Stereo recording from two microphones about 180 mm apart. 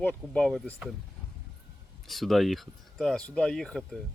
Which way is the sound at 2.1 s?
Centre (ahead or behind).